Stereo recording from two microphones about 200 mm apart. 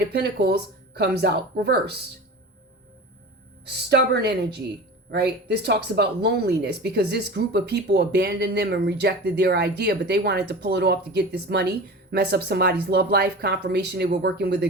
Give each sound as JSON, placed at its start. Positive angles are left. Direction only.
{"t": 0.1, "sound": "speech", "side_deg": -55}
{"t": 3.7, "sound": "speech", "side_deg": -55}